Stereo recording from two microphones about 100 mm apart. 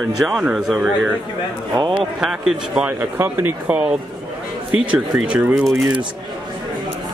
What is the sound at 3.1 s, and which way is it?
Speech, 20° right (ahead or behind).